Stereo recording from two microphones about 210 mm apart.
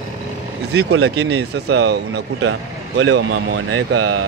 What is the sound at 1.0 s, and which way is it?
Speech, 55° right (ahead or behind).